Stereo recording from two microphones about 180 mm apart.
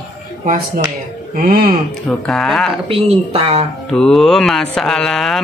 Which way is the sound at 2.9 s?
35° right (ahead or behind).